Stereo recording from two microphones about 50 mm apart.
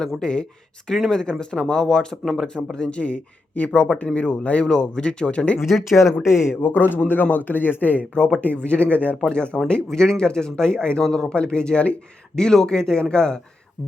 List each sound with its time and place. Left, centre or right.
0.2 s speech: centre
2.7 s speech: left
4.6 s speech: centre
5.5 s speech: centre
6.6 s a man's voice: left
8.1 s speech: centre